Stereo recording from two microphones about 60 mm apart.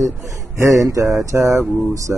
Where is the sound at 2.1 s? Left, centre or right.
Right.